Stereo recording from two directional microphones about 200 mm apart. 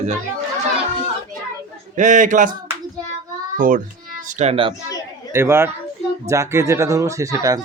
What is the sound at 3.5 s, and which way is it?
A child's voice, 40° right (ahead or behind).